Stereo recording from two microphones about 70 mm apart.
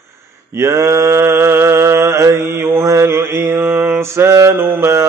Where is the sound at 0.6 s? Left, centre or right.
Right.